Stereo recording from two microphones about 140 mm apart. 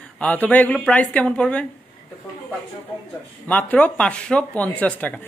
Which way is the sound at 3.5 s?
10° left (ahead or behind).